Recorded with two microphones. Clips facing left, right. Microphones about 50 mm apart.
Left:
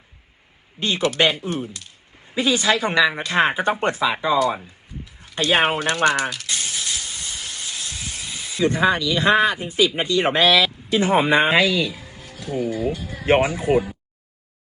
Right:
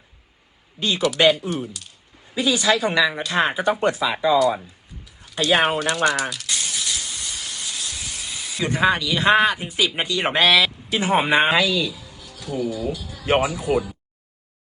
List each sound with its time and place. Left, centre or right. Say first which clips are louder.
0.8 s a woman's voice: right 1 dB; left
4.6 s a sound: left 5 dB; left
8.5 s speech: left 1 dB; right
11.5 s speech: left 2 dB; left